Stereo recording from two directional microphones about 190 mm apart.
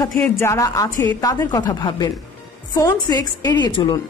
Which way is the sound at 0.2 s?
15° left (ahead or behind).